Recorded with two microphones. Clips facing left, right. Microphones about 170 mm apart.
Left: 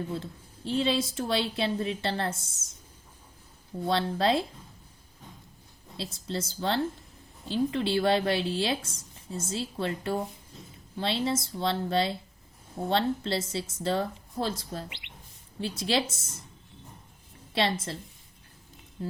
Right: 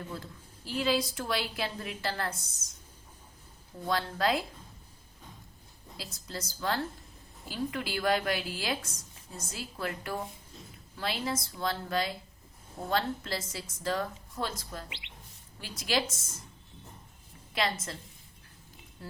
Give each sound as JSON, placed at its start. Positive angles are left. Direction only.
{"t": 0.1, "sound": "a woman's voice", "side_deg": 25}
{"t": 3.8, "sound": "a woman's voice", "side_deg": 30}
{"t": 6.0, "sound": "a woman's voice", "side_deg": 25}
{"t": 17.5, "sound": "a woman's voice", "side_deg": 30}